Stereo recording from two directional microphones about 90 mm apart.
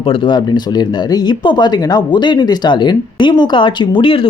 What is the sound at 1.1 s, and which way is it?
Speech, 55° left (ahead or behind).